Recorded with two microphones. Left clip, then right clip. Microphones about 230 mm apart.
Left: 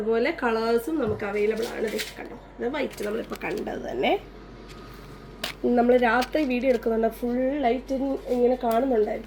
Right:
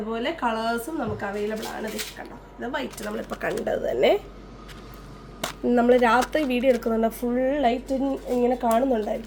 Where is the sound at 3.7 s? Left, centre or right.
Right.